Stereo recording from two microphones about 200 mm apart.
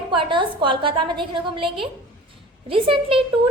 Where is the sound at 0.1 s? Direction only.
25° right (ahead or behind).